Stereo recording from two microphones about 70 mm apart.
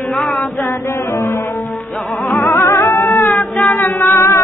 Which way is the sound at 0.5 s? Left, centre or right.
Left.